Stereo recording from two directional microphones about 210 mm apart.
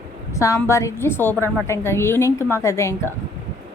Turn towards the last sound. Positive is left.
turn(degrees=15)  # may be behind; listen again after turning